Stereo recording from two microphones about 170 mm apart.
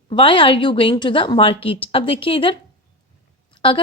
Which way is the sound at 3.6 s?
30° left (ahead or behind).